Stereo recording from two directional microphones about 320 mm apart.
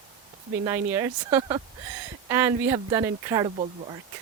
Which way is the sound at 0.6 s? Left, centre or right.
Centre.